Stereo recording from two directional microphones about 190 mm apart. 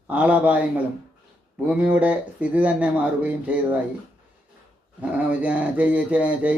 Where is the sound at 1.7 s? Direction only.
5° right (ahead or behind).